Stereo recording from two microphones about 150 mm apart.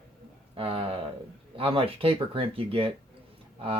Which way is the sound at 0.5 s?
40° right (ahead or behind).